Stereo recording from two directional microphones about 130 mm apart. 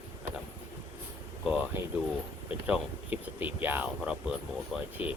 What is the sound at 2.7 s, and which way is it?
Speech, 10° right (ahead or behind).